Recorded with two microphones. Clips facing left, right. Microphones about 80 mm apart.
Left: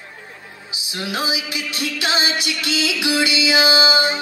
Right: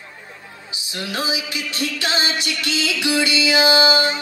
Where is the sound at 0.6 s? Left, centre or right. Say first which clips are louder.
Left 2 dB; centre.